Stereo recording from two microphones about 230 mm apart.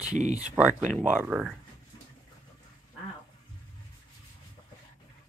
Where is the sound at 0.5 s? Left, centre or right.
Centre.